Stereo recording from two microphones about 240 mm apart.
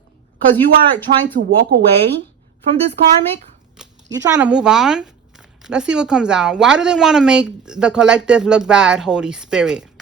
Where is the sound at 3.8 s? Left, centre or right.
Centre.